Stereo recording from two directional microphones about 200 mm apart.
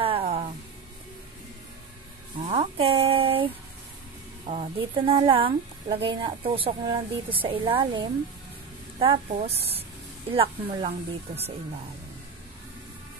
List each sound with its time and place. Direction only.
0.0 s music: 25° right (ahead or behind)
2.4 s a sound: 30° right (ahead or behind)
4.5 s a woman's voice: 25° right (ahead or behind)